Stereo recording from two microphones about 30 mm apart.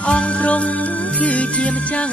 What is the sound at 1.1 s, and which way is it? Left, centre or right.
Music, left.